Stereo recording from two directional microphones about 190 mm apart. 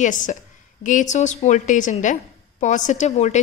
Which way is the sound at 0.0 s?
40° left (ahead or behind).